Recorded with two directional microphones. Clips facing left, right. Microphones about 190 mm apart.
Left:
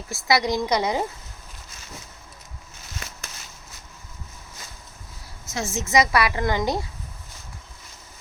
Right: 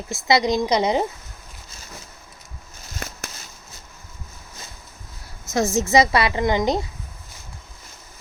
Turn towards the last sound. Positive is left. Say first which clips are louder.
# right 4 dB
turn(degrees=-20)  # may be behind; listen again after turning